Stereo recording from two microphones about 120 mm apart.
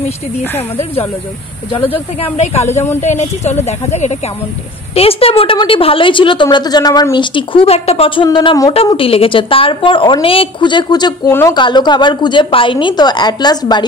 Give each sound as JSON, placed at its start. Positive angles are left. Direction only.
{"t": 1.9, "sound": "speech", "side_deg": 55}
{"t": 4.9, "sound": "a woman's voice", "side_deg": 55}